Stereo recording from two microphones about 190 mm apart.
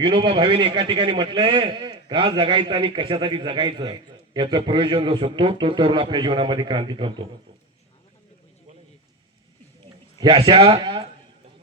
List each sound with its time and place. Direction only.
0.0 s a man's voice: 25° right (ahead or behind)
10.2 s a man's voice: 25° right (ahead or behind)